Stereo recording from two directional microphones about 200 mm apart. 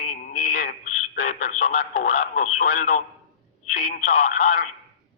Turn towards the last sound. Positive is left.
turn(degrees=40)  # may be behind; listen again after turning